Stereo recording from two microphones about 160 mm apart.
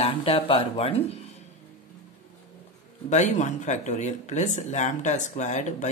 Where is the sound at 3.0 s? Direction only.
50° left (ahead or behind).